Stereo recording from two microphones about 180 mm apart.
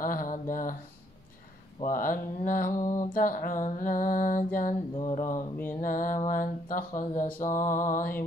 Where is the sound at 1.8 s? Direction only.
50° left (ahead or behind).